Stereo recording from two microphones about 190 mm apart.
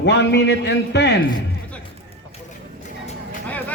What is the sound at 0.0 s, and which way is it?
A man's voice, 65° left (ahead or behind).